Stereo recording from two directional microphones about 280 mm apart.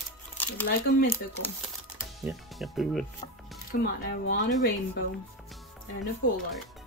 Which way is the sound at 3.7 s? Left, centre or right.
Left.